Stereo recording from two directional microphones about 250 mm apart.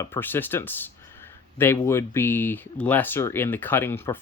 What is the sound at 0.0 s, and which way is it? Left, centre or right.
Speech, centre.